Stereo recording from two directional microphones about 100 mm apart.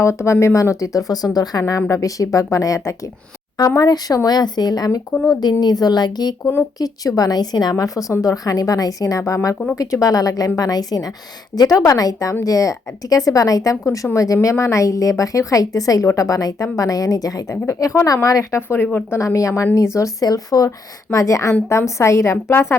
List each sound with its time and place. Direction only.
0.0 s speech: 30° left (ahead or behind)
19.2 s a woman's voice: 35° left (ahead or behind)